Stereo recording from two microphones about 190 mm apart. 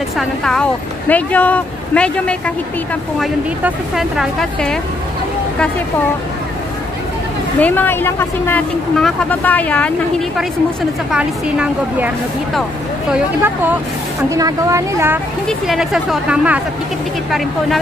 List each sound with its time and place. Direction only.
0.2 s a woman's voice: 5° left (ahead or behind)
7.6 s a woman's voice: 10° left (ahead or behind); by 12.1 s 5° right (ahead or behind)
13.1 s speech: 10° right (ahead or behind)
15.4 s a woman's voice: centre (ahead or behind)